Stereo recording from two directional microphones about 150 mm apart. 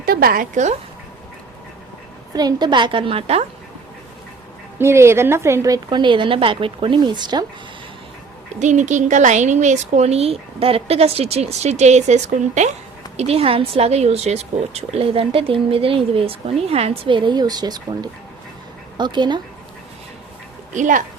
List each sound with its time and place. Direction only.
0.0 s a sound: 90° right
0.5 s a woman's voice: 50° right (ahead or behind)
2.3 s speech: 25° right (ahead or behind)
4.8 s speech: 15° right (ahead or behind)
8.5 s a woman's voice: 55° right (ahead or behind)
13.1 s speech: 40° right (ahead or behind)
20.7 s speech: 60° right (ahead or behind)